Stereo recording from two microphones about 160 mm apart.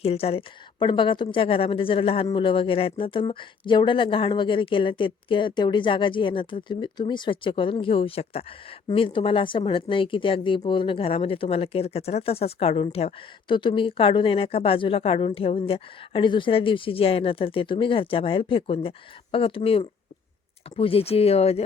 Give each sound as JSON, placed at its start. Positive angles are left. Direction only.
{"t": 0.0, "sound": "speech", "side_deg": 40}